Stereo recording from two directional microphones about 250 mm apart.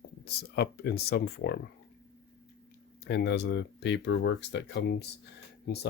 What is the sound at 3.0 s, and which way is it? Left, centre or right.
Speech, left.